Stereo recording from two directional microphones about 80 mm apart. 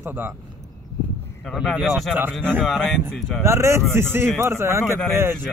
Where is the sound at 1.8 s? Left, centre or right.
Centre.